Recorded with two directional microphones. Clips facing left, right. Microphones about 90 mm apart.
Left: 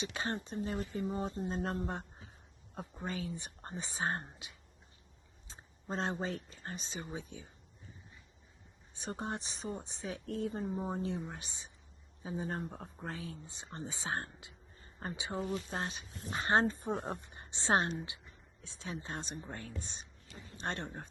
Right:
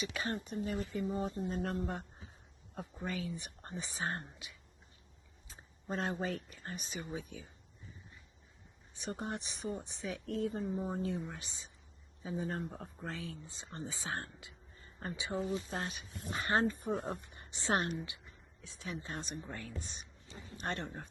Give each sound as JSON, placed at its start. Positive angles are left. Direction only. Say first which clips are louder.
{"t": 0.0, "sound": "speech", "louder": "even", "side_deg": 30}
{"t": 3.1, "sound": "speech", "louder": "even", "side_deg": 30}
{"t": 5.5, "sound": "a sound", "louder": "even", "side_deg": 30}
{"t": 6.7, "sound": "speech", "louder": "even", "side_deg": 30}
{"t": 9.0, "sound": "speech", "louder": "left 1 dB", "side_deg": 30}